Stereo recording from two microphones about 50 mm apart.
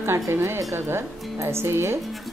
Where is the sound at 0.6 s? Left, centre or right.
Right.